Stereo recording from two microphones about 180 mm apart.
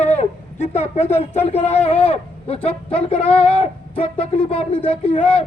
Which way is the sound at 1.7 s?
30° left (ahead or behind).